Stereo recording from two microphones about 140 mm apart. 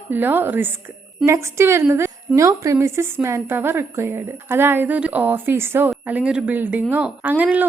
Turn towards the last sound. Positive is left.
turn(degrees=-10)  # may be behind; listen again after turning